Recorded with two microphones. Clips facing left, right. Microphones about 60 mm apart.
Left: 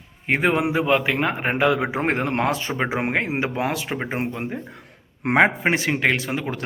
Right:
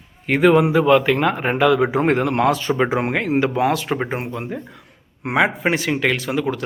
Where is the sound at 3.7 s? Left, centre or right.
Centre.